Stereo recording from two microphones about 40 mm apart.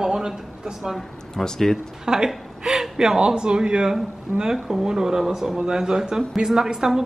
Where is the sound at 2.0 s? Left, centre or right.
Centre.